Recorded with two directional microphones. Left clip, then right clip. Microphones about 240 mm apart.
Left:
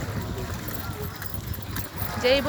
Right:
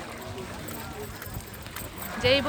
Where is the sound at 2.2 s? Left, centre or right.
Centre.